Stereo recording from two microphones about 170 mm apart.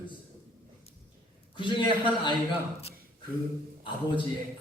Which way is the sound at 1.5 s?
30° left (ahead or behind).